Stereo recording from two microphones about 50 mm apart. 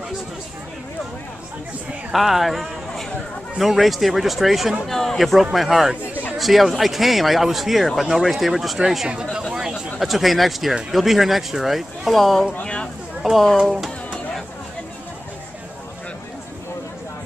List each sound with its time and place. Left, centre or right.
2.1 s speech: centre
12.6 s a sound: centre
13.2 s speech: centre